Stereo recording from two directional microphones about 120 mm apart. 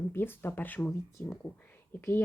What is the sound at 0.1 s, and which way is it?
Speech, 20° left (ahead or behind).